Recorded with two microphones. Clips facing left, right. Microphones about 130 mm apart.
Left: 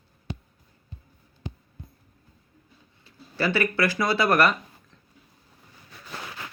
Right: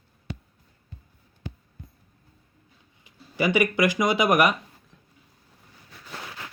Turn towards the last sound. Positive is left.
turn(degrees=-15)  # may be behind; listen again after turning